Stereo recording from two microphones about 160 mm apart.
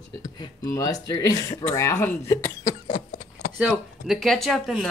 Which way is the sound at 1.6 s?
20° left (ahead or behind).